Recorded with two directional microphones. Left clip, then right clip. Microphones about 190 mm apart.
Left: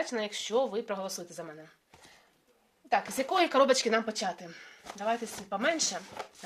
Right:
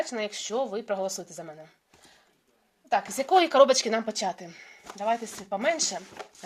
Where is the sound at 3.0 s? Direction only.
25° right (ahead or behind).